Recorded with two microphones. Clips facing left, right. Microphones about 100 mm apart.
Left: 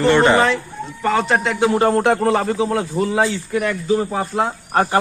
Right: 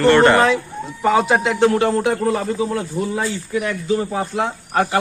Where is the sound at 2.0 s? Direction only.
70° left (ahead or behind).